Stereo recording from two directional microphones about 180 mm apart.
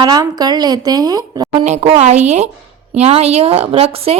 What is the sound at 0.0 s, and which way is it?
A woman's voice, 20° right (ahead or behind).